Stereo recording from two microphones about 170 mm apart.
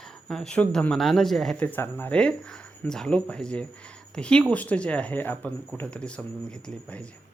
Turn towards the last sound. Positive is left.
turn(degrees=5)  # may be behind; listen again after turning